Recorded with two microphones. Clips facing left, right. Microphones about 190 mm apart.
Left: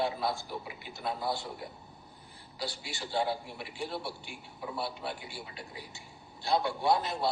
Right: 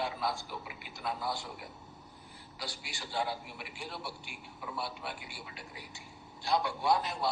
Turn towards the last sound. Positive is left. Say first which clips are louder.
# left 2 dB
turn(degrees=30)  # may be behind; listen again after turning